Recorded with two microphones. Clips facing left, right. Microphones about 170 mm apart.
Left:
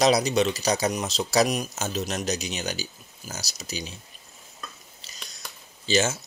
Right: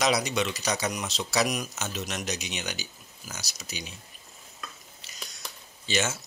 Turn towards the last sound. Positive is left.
turn(degrees=35)  # may be behind; listen again after turning